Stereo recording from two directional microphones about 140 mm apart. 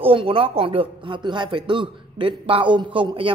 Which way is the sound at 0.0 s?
40° right (ahead or behind).